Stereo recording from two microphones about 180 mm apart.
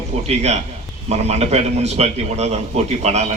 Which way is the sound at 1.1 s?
35° right (ahead or behind).